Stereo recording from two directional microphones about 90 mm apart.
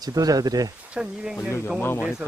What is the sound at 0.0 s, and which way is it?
Speech, 45° right (ahead or behind).